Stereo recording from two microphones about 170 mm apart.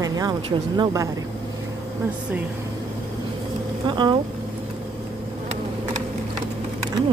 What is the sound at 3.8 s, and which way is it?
Speech, 25° right (ahead or behind).